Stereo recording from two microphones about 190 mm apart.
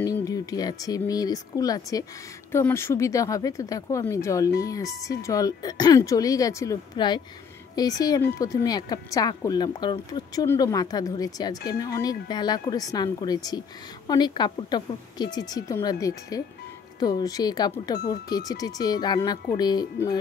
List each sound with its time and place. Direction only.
0.0 s speech: 20° left (ahead or behind)